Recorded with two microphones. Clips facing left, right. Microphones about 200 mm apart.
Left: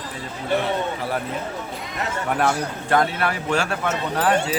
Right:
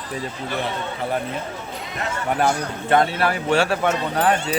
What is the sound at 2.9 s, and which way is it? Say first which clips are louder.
Speech: right 2 dB; 30° right (ahead or behind).